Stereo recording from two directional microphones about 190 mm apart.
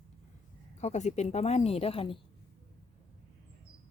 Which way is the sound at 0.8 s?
35° left (ahead or behind).